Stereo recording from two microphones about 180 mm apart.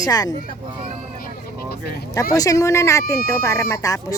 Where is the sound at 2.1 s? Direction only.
20° left (ahead or behind).